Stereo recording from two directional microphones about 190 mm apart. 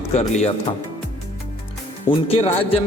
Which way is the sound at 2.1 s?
30° left (ahead or behind).